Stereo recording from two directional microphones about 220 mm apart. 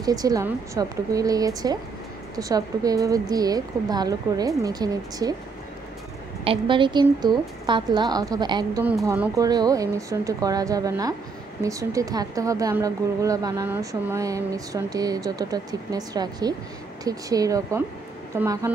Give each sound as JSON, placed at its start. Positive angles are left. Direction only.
{"t": 0.0, "sound": "speech", "side_deg": -15}
{"t": 6.4, "sound": "a woman's voice", "side_deg": -25}